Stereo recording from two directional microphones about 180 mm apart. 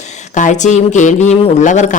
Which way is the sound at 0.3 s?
45° left (ahead or behind).